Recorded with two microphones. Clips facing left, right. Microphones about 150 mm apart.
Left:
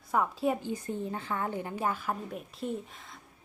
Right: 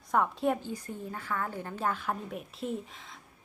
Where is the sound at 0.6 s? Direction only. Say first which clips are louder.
Left 4 dB; 20° left (ahead or behind).